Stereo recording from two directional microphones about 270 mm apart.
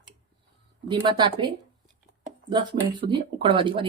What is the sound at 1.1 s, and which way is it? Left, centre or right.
Speech, centre.